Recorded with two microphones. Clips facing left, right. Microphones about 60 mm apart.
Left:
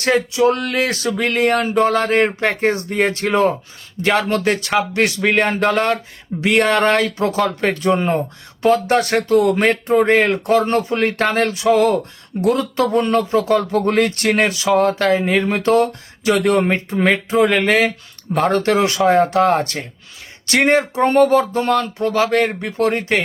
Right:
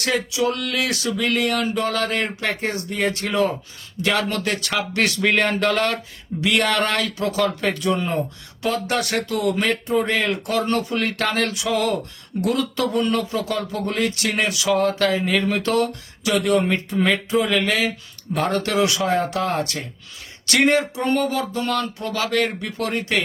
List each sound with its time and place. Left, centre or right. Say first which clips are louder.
0.0 s speech: left 6 dB; left
20.5 s speech: left 3 dB; left